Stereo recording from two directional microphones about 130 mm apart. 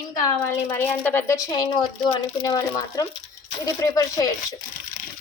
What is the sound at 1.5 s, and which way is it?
A woman's voice, 30° left (ahead or behind).